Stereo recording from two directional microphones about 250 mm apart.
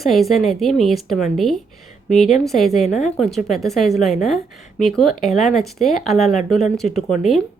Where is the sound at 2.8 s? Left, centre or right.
Left.